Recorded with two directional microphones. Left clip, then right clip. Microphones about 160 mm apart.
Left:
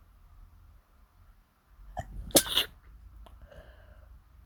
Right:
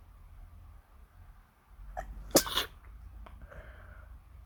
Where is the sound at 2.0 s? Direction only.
15° left (ahead or behind).